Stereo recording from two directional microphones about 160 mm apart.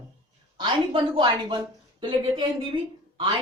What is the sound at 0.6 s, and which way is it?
Speech, 30° right (ahead or behind).